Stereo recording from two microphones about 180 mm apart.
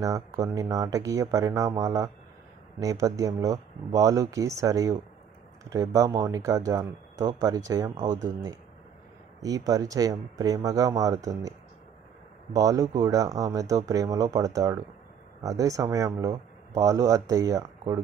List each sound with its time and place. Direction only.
0.0 s speech: 20° right (ahead or behind)
9.4 s speech: 20° right (ahead or behind)
12.5 s speech: 20° right (ahead or behind)